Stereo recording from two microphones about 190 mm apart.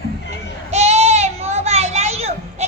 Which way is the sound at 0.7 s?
35° right (ahead or behind).